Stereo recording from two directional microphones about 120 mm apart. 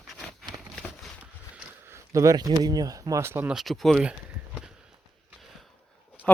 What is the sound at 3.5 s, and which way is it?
Speech, centre (ahead or behind).